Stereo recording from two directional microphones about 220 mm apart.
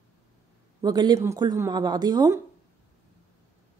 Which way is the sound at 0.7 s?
20° right (ahead or behind).